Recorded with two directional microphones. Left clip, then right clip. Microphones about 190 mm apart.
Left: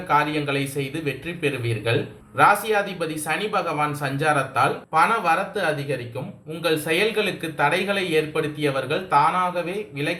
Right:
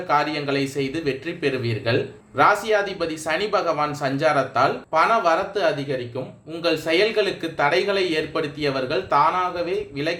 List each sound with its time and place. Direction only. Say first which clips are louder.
0.1 s speech: even; 45° right (ahead or behind)